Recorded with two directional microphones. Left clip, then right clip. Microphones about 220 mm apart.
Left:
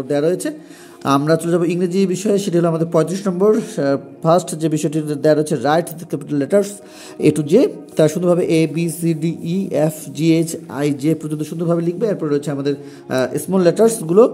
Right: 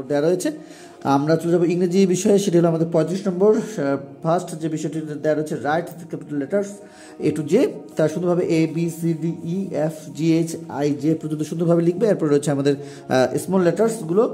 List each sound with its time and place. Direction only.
0.1 s speech: 10° left (ahead or behind)
13.5 s speech: 15° left (ahead or behind)